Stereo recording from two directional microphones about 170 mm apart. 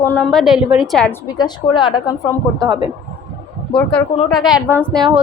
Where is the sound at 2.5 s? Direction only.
25° right (ahead or behind).